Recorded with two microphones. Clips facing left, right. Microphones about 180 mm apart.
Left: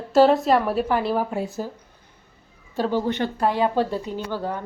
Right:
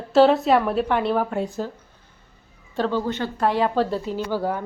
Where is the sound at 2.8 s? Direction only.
15° left (ahead or behind).